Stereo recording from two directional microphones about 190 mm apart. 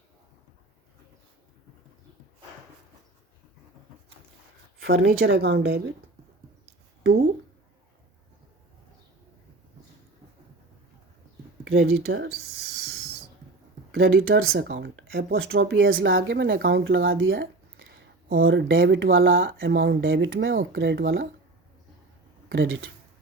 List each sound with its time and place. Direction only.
4.8 s speech: 60° right (ahead or behind)
11.6 s speech: 60° right (ahead or behind)
13.9 s speech: 65° right (ahead or behind); by 16.1 s 90° right
16.2 s speech: 75° right (ahead or behind); by 17.3 s 90° right
17.3 s a sound: 60° right (ahead or behind); by 19.0 s 90° right
19.1 s speech: 90° right; by 21.2 s 65° right (ahead or behind)
22.5 s speech: 90° right